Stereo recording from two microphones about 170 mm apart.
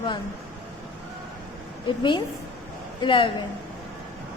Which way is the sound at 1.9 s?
25° left (ahead or behind).